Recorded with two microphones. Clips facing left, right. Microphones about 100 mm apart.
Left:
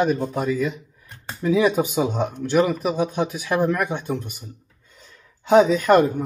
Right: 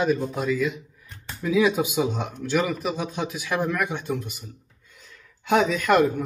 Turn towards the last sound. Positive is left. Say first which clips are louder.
# left 3 dB
turn(degrees=30)  # may be behind; listen again after turning